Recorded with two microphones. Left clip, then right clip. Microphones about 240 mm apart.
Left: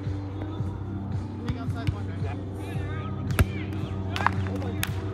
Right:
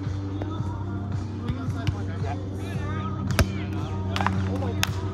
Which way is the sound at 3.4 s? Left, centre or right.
Right.